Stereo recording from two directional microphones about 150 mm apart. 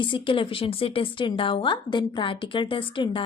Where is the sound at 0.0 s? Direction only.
35° left (ahead or behind).